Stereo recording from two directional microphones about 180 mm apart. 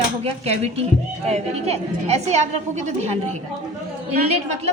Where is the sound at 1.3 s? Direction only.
35° right (ahead or behind).